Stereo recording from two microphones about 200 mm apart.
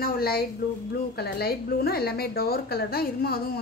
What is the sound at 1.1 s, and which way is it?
Speech, 50° left (ahead or behind).